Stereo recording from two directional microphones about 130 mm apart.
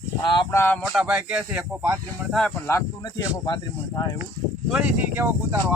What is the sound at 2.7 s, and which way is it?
Speech, 25° left (ahead or behind).